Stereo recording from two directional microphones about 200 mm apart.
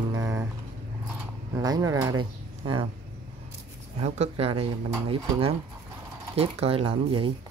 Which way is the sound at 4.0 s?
30° right (ahead or behind).